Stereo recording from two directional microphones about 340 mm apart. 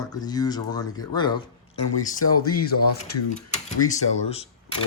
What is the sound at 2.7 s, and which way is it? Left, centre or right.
Speech, left.